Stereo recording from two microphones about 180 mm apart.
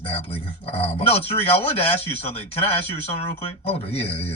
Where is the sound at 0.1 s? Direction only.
35° left (ahead or behind).